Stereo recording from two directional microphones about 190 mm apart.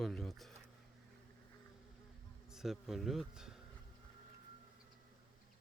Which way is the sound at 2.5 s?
Centre (ahead or behind).